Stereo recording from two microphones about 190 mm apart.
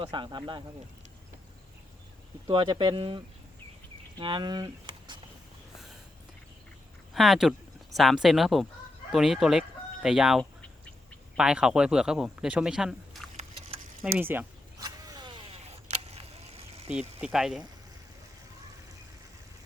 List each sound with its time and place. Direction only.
0.0 s speech: 25° right (ahead or behind)
2.5 s speech: 25° right (ahead or behind)
7.1 s speech: centre (ahead or behind)
14.8 s vehicle: 20° right (ahead or behind)
17.2 s speech: 5° right (ahead or behind)